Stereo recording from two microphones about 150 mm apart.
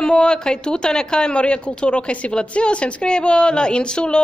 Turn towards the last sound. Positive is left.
turn(degrees=5)  # may be behind; listen again after turning